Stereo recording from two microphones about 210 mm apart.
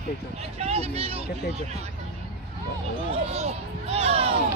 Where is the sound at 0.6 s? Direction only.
30° right (ahead or behind).